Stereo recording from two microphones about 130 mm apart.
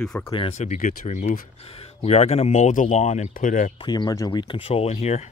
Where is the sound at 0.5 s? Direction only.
65° left (ahead or behind); by 3.7 s 85° left.